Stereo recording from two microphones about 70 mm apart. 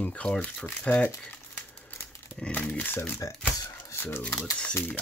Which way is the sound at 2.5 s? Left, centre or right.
Left.